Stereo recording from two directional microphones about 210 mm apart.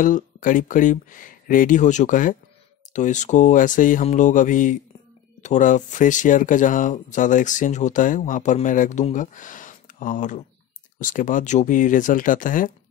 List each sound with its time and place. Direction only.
0.0 s speech: 40° left (ahead or behind)